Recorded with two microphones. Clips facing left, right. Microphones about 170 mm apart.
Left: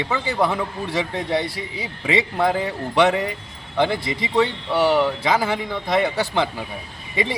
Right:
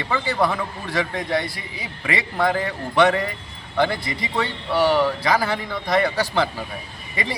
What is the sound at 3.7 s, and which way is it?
A man's voice, 20° left (ahead or behind).